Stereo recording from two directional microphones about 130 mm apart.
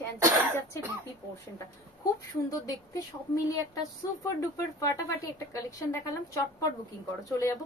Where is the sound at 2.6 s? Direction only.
25° left (ahead or behind).